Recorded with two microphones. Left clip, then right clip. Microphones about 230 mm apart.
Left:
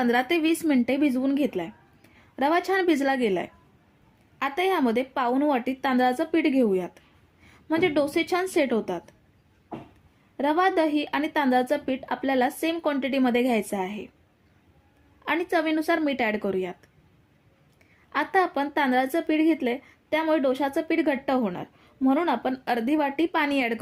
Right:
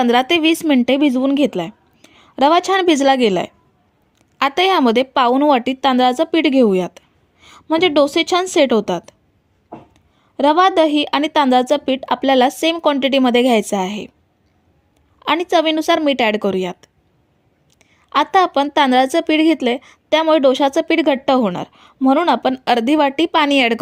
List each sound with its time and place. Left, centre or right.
0.0 s a woman's voice: right
10.3 s a woman's voice: right
15.2 s a woman's voice: right